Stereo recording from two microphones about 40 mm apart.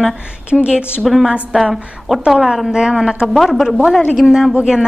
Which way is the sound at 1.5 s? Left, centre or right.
Centre.